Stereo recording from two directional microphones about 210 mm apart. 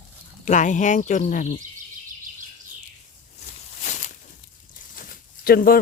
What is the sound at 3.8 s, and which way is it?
Walk, 35° left (ahead or behind).